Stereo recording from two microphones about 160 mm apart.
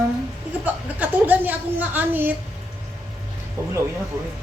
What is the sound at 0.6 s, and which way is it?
A woman's voice, 10° right (ahead or behind).